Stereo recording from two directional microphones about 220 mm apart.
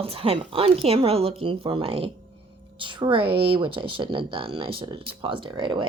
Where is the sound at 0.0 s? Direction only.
25° right (ahead or behind).